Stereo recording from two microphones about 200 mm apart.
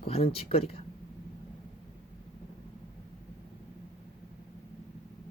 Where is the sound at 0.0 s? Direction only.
30° left (ahead or behind).